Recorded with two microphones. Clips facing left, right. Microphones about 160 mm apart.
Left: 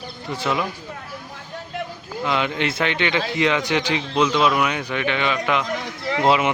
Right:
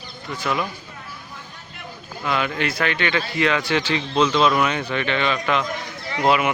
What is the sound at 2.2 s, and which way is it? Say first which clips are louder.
A man's voice: left 1 dB; 20° left (ahead or behind).